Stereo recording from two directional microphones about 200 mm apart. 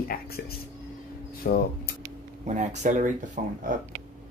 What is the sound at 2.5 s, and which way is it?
Speech, 35° right (ahead or behind).